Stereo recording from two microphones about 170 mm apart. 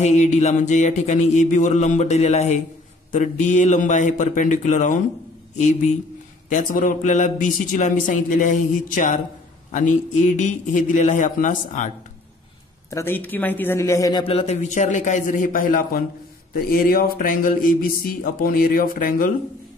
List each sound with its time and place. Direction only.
0.0 s speech: 40° left (ahead or behind)
12.9 s speech: 15° left (ahead or behind)
14.2 s a man's voice: 35° left (ahead or behind); by 19.3 s 55° left (ahead or behind)